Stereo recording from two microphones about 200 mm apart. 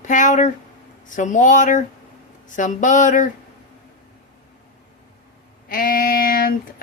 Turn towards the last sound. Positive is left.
turn(degrees=50)  # may be behind; listen again after turning